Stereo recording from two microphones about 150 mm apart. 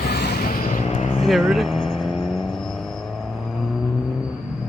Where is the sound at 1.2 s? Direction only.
Centre (ahead or behind).